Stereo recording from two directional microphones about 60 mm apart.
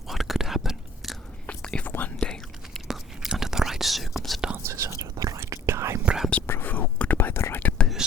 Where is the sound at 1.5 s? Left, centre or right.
Left.